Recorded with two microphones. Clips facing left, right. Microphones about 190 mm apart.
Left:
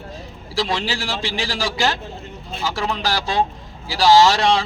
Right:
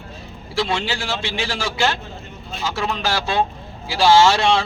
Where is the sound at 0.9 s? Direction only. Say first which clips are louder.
Even; 35° left (ahead or behind).